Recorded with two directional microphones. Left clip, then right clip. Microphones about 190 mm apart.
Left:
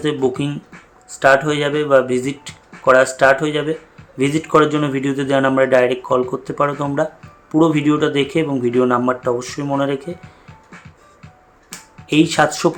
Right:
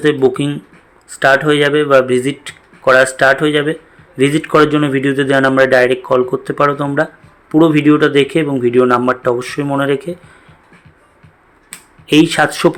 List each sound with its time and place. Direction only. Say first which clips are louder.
0.0 s speech: right 6 dB; 15° right (ahead or behind)
12.0 s speech: right 4 dB; 15° right (ahead or behind)